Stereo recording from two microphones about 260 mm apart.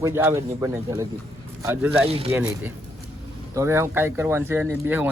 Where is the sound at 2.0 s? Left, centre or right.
Right.